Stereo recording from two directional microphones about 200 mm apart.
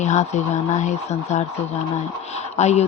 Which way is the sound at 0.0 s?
35° left (ahead or behind).